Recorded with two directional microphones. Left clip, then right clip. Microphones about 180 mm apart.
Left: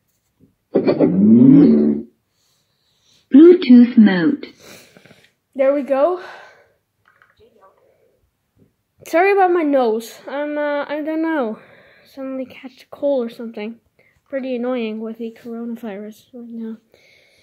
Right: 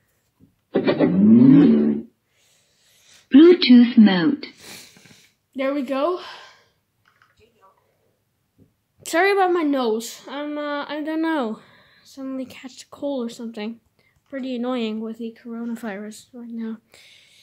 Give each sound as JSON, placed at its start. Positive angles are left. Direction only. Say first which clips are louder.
{"t": 0.7, "sound": "a sound", "louder": "left 4 dB", "side_deg": 5}
{"t": 3.3, "sound": "a sound", "louder": "left 3 dB", "side_deg": 0}
{"t": 4.1, "sound": "speech", "louder": "left 3 dB", "side_deg": -5}
{"t": 4.6, "sound": "a sound", "louder": "right 1 dB", "side_deg": -15}
{"t": 5.6, "sound": "speech", "louder": "left 8 dB", "side_deg": -5}
{"t": 9.0, "sound": "speech", "louder": "left 4 dB", "side_deg": -15}
{"t": 11.6, "sound": "speech", "louder": "left 5 dB", "side_deg": -5}
{"t": 14.7, "sound": "speech", "louder": "left 3 dB", "side_deg": -25}
{"t": 17.1, "sound": "whispering", "louder": "right 1 dB", "side_deg": -15}